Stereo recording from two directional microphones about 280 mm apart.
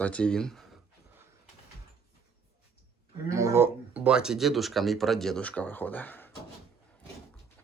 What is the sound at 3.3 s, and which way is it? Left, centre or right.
Speech, centre.